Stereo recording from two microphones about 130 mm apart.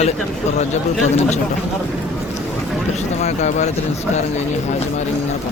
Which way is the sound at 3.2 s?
60° left (ahead or behind).